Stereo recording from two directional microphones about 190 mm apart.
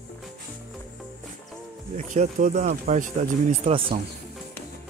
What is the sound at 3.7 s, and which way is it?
Speech, 30° right (ahead or behind).